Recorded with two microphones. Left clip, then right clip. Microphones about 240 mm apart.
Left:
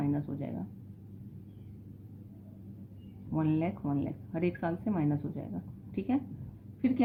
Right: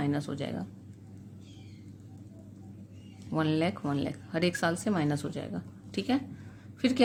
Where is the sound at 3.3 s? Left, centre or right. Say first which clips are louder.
Right 3 dB; right.